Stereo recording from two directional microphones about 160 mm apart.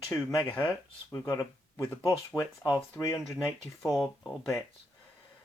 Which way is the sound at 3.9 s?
5° left (ahead or behind).